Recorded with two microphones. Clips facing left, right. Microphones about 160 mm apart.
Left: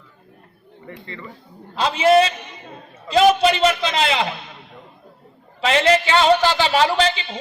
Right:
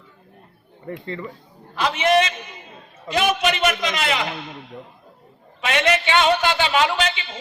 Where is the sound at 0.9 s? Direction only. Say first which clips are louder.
Right 6 dB; 40° right (ahead or behind).